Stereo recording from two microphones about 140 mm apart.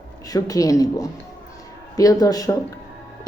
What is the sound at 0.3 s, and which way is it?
Speech, 25° left (ahead or behind).